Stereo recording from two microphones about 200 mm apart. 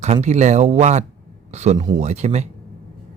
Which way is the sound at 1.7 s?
20° right (ahead or behind).